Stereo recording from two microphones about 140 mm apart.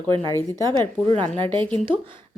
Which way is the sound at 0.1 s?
35° right (ahead or behind).